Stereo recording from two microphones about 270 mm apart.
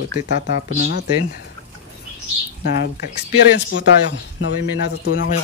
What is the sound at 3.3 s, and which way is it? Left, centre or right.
Speech, left.